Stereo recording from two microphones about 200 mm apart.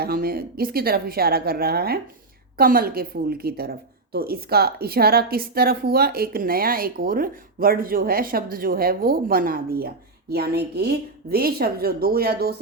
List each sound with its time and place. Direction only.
0.0 s a woman's voice: 50° right (ahead or behind)